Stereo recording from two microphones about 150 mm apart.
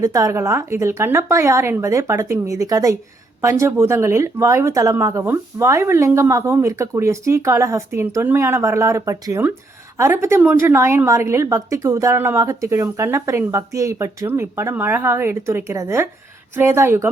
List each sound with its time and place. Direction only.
0.0 s speech: 20° right (ahead or behind)